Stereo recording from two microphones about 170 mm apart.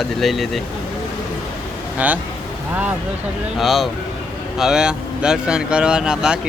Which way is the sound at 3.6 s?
Centre (ahead or behind).